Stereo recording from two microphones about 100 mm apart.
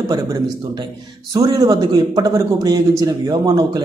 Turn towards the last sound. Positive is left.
turn(degrees=-40)  # may be behind; listen again after turning